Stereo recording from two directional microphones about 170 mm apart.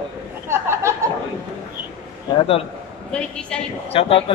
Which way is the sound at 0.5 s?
15° right (ahead or behind).